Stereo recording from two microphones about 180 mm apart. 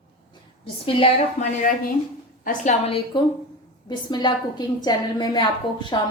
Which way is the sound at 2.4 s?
45° left (ahead or behind).